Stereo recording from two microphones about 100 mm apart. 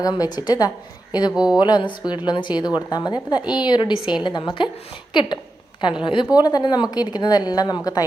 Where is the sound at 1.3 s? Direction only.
5° right (ahead or behind).